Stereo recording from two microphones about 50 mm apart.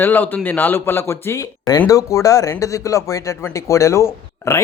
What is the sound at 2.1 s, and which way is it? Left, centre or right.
Speech, left.